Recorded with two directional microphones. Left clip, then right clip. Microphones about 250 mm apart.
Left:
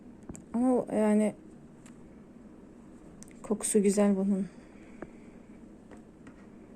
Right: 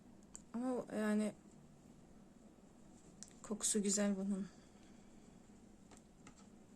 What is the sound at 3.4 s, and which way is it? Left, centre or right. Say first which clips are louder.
Speech: left 13 dB; centre.